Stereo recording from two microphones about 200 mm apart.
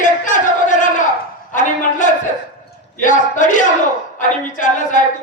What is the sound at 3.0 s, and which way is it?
A woman's voice, 40° left (ahead or behind).